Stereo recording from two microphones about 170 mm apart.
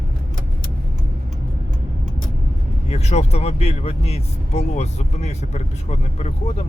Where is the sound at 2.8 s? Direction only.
40° left (ahead or behind).